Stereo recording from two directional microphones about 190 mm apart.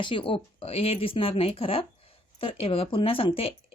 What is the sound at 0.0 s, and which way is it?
Speech, 25° left (ahead or behind).